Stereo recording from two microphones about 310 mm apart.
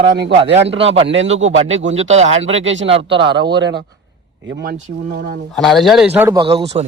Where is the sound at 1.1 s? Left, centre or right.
Right.